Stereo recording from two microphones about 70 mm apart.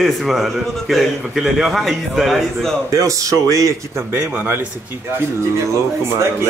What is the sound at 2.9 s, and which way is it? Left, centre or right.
Speech, right.